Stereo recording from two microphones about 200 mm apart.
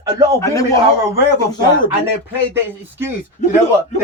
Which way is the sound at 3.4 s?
40° left (ahead or behind).